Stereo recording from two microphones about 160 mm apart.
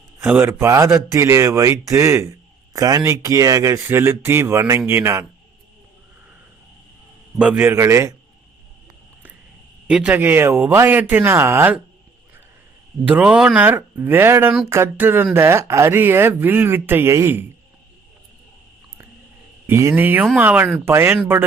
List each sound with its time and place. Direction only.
0.2 s a man's voice: 10° right (ahead or behind)
7.3 s speech: 5° right (ahead or behind)
9.8 s speech: 5° right (ahead or behind)
13.1 s speech: 10° right (ahead or behind)
19.6 s speech: 15° right (ahead or behind)